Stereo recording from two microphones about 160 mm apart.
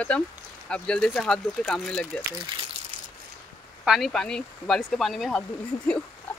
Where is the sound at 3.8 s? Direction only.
Centre (ahead or behind).